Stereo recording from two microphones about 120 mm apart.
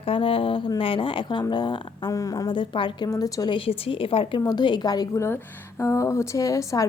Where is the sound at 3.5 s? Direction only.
50° left (ahead or behind).